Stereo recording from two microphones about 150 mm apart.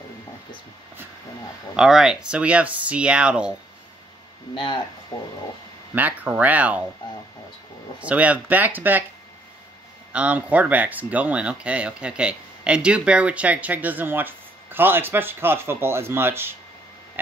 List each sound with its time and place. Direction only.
1.8 s speech: 5° right (ahead or behind)
5.1 s speech: 25° left (ahead or behind)
5.9 s speech: 10° right (ahead or behind)
8.0 s speech: 10° right (ahead or behind)
10.1 s speech: 10° right (ahead or behind)